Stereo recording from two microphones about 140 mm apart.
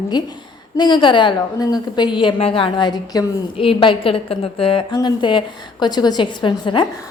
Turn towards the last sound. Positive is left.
turn(degrees=35)  # may be behind; listen again after turning